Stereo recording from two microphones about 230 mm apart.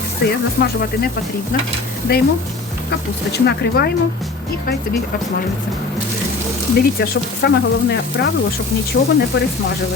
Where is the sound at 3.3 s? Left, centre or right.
Left.